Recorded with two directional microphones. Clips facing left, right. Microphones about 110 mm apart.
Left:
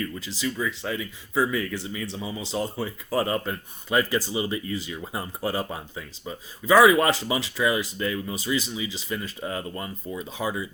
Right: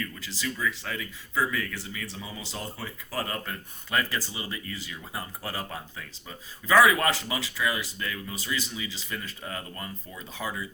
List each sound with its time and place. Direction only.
0.2 s speech: 20° left (ahead or behind)